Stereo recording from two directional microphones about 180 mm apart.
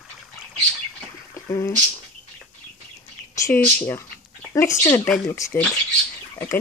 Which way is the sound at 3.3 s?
15° left (ahead or behind).